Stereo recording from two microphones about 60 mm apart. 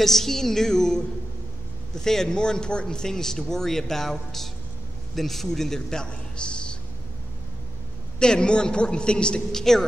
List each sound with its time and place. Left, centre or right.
0.0 s a man's voice: centre
8.2 s speech: centre